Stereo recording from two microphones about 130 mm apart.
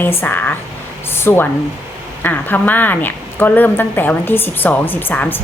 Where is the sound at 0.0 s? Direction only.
15° left (ahead or behind).